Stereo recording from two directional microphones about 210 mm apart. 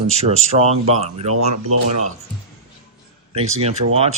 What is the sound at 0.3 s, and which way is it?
Speech, 30° right (ahead or behind).